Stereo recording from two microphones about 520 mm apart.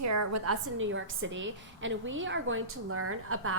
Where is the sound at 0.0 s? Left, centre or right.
Right.